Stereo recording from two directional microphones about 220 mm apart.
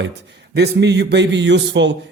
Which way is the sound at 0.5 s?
50° right (ahead or behind).